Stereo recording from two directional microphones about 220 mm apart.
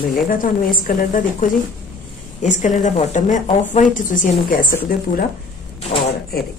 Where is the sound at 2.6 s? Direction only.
35° left (ahead or behind).